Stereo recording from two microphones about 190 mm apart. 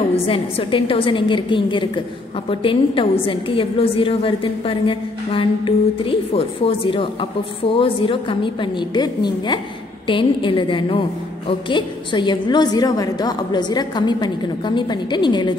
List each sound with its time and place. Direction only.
0.1 s a woman's voice: 30° left (ahead or behind)